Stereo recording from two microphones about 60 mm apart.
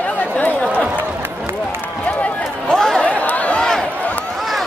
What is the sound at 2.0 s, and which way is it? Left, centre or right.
Run, left.